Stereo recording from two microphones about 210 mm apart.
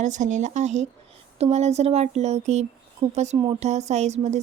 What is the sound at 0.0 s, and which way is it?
A woman's voice, 35° right (ahead or behind).